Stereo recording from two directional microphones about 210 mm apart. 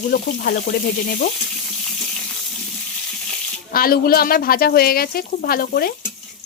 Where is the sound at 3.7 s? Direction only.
45° left (ahead or behind).